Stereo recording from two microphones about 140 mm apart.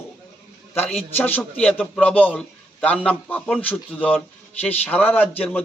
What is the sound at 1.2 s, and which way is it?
A man's voice, 10° left (ahead or behind).